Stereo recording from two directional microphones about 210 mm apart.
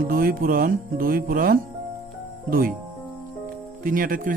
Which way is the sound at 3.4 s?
40° right (ahead or behind).